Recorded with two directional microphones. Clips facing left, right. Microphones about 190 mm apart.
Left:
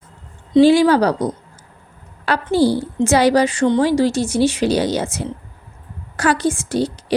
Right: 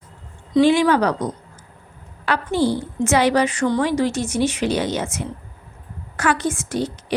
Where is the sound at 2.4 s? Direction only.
35° left (ahead or behind).